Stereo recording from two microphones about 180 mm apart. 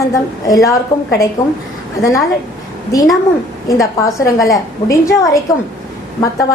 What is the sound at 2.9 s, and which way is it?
A woman's voice, 20° left (ahead or behind).